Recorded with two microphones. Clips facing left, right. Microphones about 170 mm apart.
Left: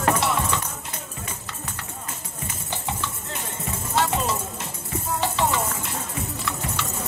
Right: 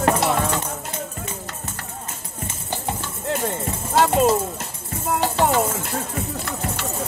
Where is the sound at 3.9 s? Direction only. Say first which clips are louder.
Right 7 dB; 45° right (ahead or behind).